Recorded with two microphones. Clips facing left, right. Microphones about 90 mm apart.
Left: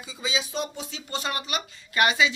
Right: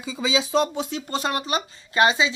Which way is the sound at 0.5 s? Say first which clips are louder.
Right 10 dB; 80° right.